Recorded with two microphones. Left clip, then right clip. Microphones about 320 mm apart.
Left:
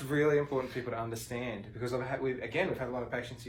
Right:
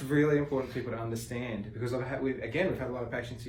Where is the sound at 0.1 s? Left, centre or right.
Centre.